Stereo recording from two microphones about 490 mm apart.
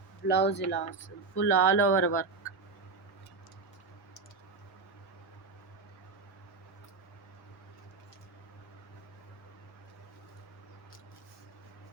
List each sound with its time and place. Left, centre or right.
0.3 s speech: left